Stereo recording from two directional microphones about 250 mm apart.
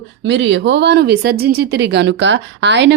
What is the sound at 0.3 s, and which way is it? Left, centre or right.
Speech, right.